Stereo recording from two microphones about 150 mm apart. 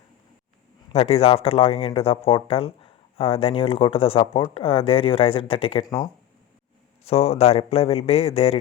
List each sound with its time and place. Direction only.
0.9 s speech: 40° left (ahead or behind)
7.0 s speech: 45° left (ahead or behind)